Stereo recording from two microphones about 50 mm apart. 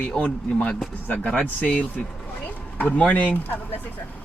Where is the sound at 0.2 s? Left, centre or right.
Left.